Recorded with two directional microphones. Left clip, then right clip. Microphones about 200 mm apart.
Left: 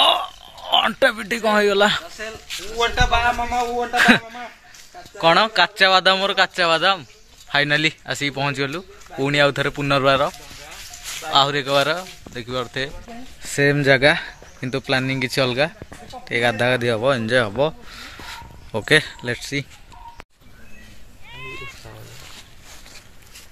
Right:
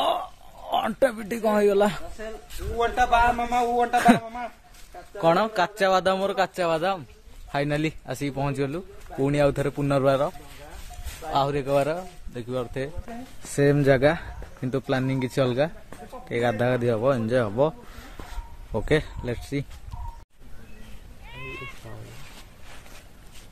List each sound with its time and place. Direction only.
0.0 s a sound: 5° right (ahead or behind)
2.8 s speech: 50° right (ahead or behind)
3.9 s speech: 5° right (ahead or behind)
11.3 s speech: centre (ahead or behind)
21.3 s cat: 40° left (ahead or behind)